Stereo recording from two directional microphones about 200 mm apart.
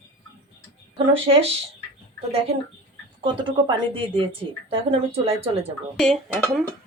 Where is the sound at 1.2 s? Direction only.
30° right (ahead or behind).